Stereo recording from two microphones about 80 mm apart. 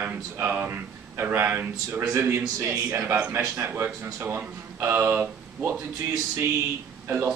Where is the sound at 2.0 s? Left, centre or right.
Right.